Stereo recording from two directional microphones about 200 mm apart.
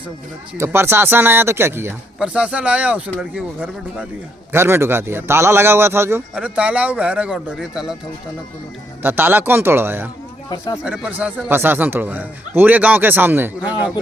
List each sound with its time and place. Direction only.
0.5 s speech: 10° right (ahead or behind)
9.0 s speech: 10° right (ahead or behind)